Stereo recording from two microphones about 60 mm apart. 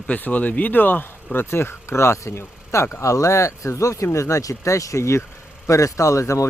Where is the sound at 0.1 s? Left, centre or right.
Left.